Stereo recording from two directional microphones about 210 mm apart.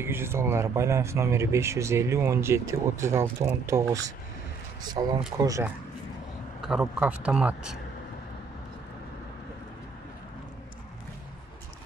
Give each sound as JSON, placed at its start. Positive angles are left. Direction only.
{"t": 0.0, "sound": "speech", "side_deg": -10}
{"t": 6.6, "sound": "a man's voice", "side_deg": 0}